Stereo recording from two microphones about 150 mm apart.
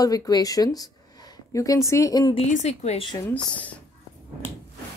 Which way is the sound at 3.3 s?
10° left (ahead or behind).